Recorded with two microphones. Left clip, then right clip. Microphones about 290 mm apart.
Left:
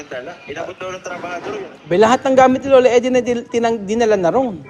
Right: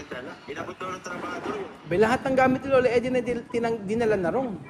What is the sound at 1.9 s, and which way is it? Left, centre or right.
A man's voice, left.